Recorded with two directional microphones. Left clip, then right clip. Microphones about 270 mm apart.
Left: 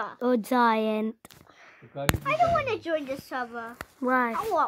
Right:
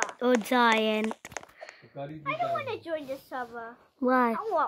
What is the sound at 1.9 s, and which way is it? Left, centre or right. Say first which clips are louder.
Speech: left 7 dB; left.